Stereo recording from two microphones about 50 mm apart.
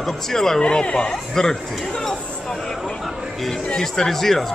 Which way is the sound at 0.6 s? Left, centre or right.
Centre.